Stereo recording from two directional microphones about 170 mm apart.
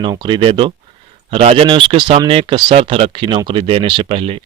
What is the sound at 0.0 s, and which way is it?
Speech, 25° right (ahead or behind).